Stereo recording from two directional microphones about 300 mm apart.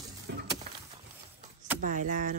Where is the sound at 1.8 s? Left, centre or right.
Right.